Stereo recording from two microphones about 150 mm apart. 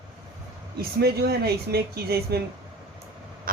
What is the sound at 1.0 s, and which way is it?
Speech, 90° right.